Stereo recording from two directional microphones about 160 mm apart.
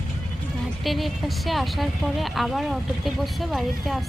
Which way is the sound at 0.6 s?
Centre (ahead or behind).